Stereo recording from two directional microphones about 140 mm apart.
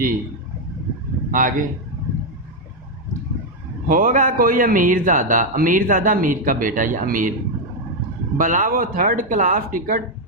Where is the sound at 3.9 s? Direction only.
75° right (ahead or behind).